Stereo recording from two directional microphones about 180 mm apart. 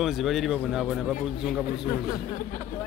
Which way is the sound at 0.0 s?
Centre (ahead or behind).